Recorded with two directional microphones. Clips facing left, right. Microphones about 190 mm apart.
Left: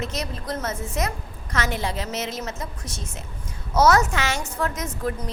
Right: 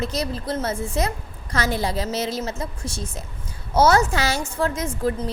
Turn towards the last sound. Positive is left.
turn(degrees=-30)  # may be behind; listen again after turning